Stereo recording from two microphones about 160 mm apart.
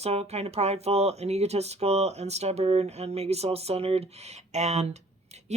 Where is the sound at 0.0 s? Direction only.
40° right (ahead or behind).